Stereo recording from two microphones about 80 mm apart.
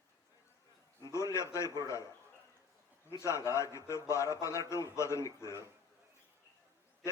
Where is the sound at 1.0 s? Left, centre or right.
Left.